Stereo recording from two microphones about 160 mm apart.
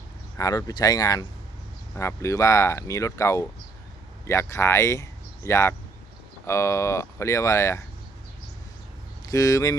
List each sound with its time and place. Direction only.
0.3 s speech: 20° left (ahead or behind)
9.2 s speech: 20° left (ahead or behind)